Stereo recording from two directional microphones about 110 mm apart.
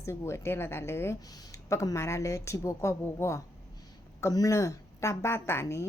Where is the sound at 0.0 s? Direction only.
25° left (ahead or behind).